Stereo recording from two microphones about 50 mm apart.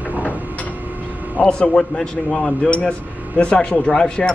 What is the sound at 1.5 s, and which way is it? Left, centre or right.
Speech, centre.